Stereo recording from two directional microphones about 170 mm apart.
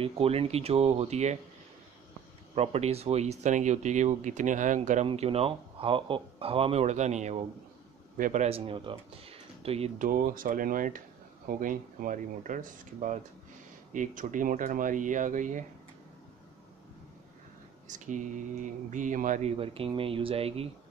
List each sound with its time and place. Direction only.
0.0 s speech: 35° right (ahead or behind)
2.5 s speech: 35° right (ahead or behind)
9.9 s speech: 55° right (ahead or behind)
17.8 s speech: 45° right (ahead or behind)
19.5 s speech: 35° right (ahead or behind)